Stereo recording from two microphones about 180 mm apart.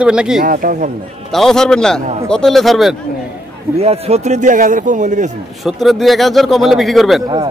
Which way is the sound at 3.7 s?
35° right (ahead or behind).